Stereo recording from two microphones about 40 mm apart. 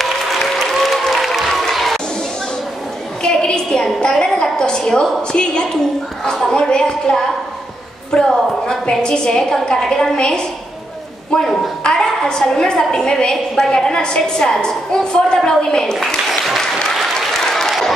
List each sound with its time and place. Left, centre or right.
0.0 s applause: centre
1.5 s crowd: centre
3.2 s a sound: left
9.0 s a woman's voice: centre
17.3 s applause: centre